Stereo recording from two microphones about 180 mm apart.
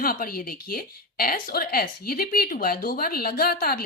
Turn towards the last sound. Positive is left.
turn(degrees=55)  # may be behind; listen again after turning